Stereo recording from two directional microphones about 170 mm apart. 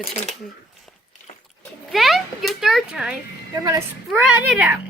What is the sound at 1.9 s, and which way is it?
A child's voice, centre (ahead or behind).